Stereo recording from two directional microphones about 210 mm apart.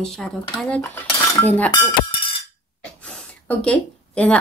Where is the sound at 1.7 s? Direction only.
25° left (ahead or behind).